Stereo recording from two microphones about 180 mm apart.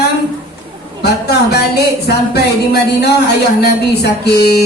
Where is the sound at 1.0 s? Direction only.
65° left (ahead or behind).